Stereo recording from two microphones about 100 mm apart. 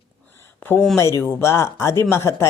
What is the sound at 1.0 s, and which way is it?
Speech, 30° left (ahead or behind).